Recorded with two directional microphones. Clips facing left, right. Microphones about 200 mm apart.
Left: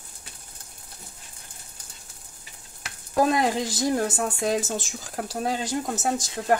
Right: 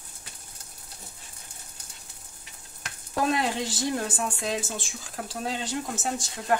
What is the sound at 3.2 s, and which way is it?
Speech, 40° left (ahead or behind).